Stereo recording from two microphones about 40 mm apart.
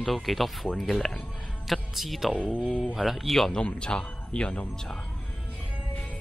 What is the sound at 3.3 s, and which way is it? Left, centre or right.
Speech, centre.